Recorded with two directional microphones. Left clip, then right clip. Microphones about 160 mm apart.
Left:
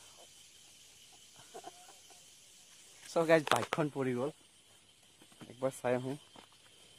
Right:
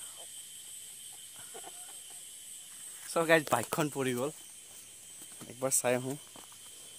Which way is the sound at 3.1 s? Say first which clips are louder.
Right 2 dB; 10° right (ahead or behind).